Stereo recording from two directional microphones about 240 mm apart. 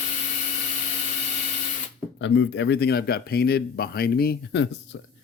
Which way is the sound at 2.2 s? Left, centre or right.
Left.